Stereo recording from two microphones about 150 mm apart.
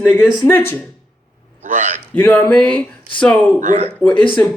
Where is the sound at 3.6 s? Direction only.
50° right (ahead or behind).